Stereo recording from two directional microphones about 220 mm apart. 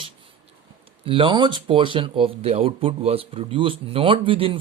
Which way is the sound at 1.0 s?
25° right (ahead or behind).